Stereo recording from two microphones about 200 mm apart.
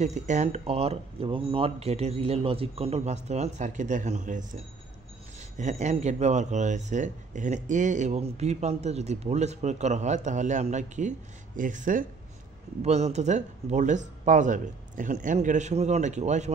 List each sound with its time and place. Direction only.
0.0 s speech: 35° right (ahead or behind)
5.6 s speech: 35° right (ahead or behind)